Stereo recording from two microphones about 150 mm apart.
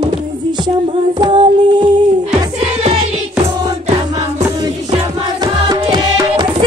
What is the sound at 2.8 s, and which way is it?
Music, 50° right (ahead or behind).